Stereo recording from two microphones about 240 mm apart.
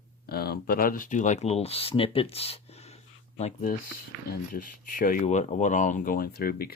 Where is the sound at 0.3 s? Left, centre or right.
Left.